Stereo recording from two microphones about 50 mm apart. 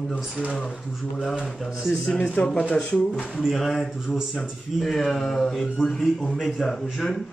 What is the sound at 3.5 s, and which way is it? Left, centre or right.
A man's voice, centre.